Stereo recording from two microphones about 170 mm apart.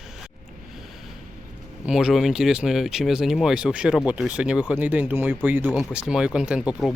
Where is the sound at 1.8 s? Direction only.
5° right (ahead or behind).